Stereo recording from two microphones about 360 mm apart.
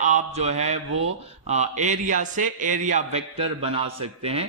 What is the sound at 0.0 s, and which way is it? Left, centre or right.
A man's voice, centre.